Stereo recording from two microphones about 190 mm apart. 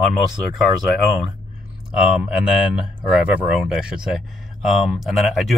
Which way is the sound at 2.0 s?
5° right (ahead or behind).